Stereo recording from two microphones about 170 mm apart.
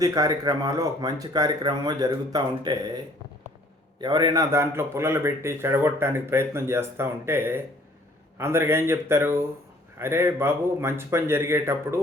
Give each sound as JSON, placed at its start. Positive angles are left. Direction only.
{"t": 0.0, "sound": "speech", "side_deg": -20}
{"t": 4.0, "sound": "a man's voice", "side_deg": -25}